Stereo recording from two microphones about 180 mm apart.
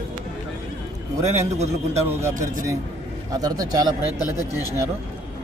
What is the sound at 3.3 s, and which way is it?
Speech, 20° right (ahead or behind).